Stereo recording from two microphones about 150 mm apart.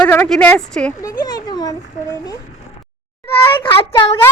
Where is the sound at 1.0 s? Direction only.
25° left (ahead or behind).